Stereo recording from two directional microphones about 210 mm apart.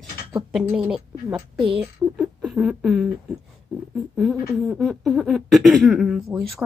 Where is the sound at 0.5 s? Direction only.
5° right (ahead or behind).